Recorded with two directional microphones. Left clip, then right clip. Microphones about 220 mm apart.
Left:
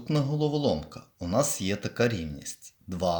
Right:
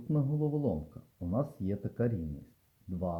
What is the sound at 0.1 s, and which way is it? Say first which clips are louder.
Speech: left 6 dB; 20° left (ahead or behind).